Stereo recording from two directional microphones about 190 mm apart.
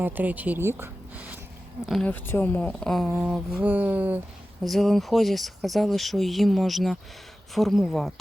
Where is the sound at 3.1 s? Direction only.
5° right (ahead or behind).